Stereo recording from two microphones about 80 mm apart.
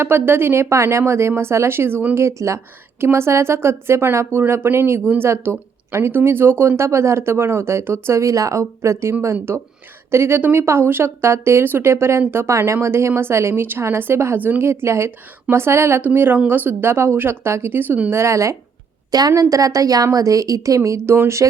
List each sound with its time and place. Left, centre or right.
0.0 s speech: right
2.1 s speech: right
18.2 s a woman's voice: right